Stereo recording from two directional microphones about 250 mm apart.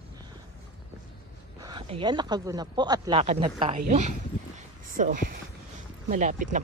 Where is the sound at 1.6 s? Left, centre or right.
Centre.